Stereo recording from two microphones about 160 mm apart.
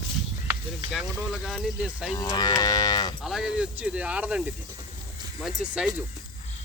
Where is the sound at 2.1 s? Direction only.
30° left (ahead or behind).